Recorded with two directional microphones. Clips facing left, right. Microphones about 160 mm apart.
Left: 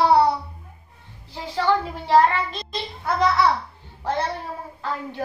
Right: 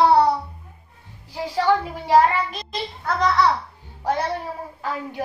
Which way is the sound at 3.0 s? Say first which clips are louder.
Even; 10° left (ahead or behind).